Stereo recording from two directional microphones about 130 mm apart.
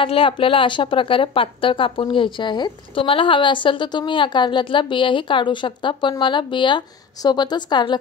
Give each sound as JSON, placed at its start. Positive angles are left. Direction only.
{"t": 0.0, "sound": "a woman's voice", "side_deg": 45}